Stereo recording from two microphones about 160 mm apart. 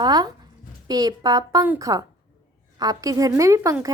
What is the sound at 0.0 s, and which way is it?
Speech, 25° right (ahead or behind).